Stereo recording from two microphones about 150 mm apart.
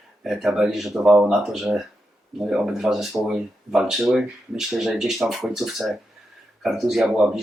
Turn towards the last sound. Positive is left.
turn(degrees=0)  # may be behind; listen again after turning